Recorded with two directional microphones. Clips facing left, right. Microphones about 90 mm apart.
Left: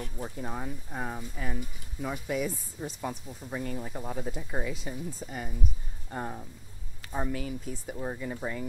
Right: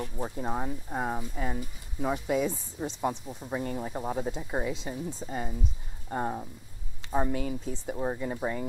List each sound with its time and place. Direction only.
0.0 s speech: 30° right (ahead or behind)